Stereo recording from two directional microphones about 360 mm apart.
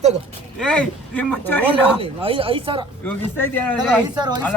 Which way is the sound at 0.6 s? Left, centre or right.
Centre.